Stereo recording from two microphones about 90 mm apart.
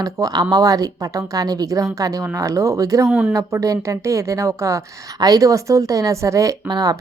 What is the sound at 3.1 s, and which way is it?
Speech, 10° right (ahead or behind).